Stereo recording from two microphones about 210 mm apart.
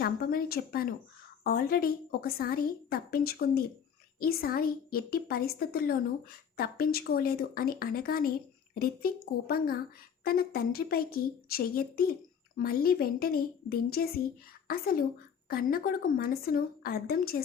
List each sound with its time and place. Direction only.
0.0 s a woman's voice: 45° left (ahead or behind)